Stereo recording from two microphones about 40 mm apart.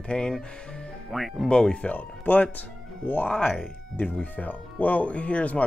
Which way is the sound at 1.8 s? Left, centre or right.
Left.